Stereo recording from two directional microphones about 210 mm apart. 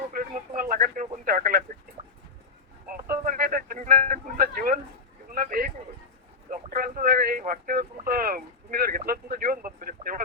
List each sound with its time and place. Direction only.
0.1 s radio: 40° right (ahead or behind)
3.1 s a man's voice: 45° right (ahead or behind)